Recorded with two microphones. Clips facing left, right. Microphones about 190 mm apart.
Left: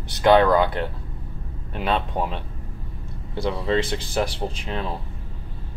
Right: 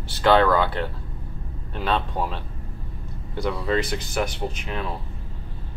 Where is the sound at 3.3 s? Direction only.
25° left (ahead or behind).